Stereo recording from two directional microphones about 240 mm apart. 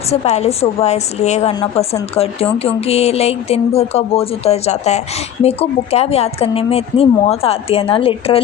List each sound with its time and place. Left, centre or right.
0.1 s speech: left